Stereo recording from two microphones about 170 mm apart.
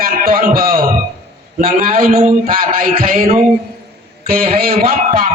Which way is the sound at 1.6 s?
60° right (ahead or behind).